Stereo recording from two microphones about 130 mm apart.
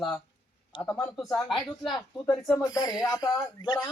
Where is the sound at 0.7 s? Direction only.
35° left (ahead or behind).